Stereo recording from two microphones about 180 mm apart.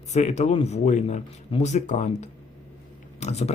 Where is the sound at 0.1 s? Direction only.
40° left (ahead or behind).